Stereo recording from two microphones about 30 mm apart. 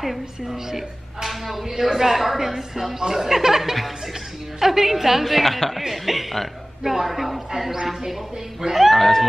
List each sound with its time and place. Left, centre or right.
0.5 s a woman's voice: centre
7.7 s a woman's voice: centre